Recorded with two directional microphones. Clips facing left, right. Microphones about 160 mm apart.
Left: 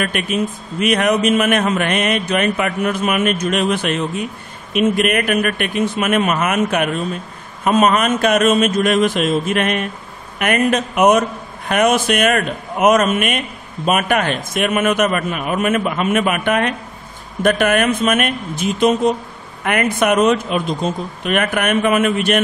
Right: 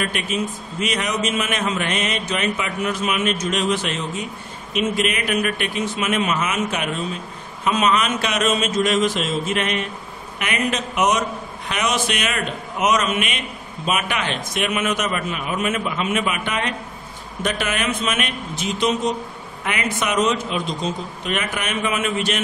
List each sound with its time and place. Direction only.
0.0 s a man's voice: 55° left (ahead or behind)